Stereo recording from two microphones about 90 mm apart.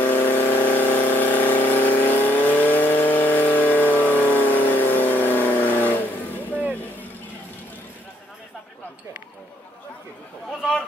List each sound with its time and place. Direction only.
0.0 s vehicle: 20° left (ahead or behind)